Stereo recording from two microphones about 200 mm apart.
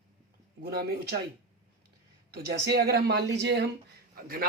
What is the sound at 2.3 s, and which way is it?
Speech, 55° right (ahead or behind).